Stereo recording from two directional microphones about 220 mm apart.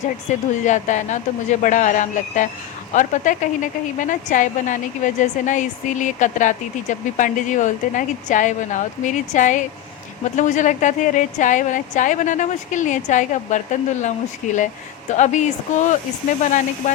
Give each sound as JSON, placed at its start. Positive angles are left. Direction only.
{"t": 0.3, "sound": "speech", "side_deg": 35}